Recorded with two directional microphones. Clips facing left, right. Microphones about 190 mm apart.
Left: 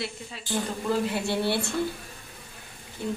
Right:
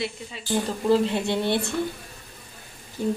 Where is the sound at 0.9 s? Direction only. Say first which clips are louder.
Right 6 dB; 20° right (ahead or behind).